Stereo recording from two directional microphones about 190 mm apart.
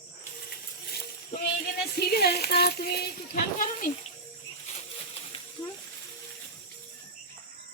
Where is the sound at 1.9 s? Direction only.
55° left (ahead or behind).